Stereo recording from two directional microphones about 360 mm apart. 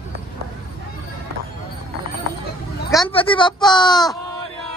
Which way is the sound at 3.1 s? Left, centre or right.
Centre.